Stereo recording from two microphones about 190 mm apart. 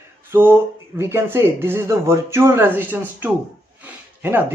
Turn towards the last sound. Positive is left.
turn(degrees=-10)  # may be behind; listen again after turning